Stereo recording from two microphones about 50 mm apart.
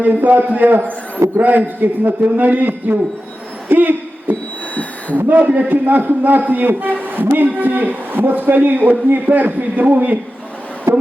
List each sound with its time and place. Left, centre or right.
0.0 s a man's voice: right
3.7 s hoot: right
4.7 s a sound: left
5.1 s a man's voice: right
10.9 s music: right